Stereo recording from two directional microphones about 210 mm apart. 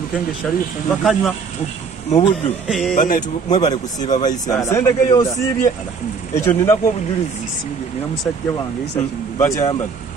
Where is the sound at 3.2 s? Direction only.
20° left (ahead or behind).